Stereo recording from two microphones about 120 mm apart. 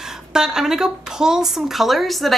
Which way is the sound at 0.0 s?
5° right (ahead or behind).